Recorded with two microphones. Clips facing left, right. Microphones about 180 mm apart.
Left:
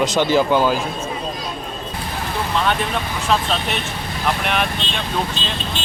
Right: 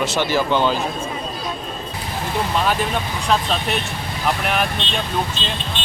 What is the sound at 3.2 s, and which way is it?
Speech, centre (ahead or behind).